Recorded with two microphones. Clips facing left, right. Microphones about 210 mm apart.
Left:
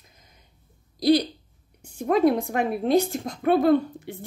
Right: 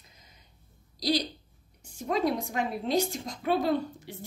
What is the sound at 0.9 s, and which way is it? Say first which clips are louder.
Speech: left 9 dB; 55° left (ahead or behind).